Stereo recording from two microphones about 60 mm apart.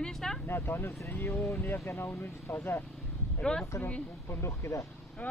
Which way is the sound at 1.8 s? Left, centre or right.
Left.